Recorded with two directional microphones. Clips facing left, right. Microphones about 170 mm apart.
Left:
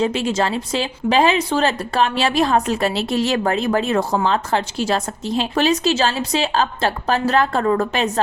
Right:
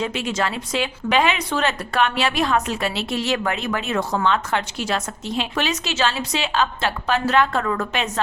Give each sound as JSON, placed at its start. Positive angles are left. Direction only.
{"t": 0.0, "sound": "speech", "side_deg": 30}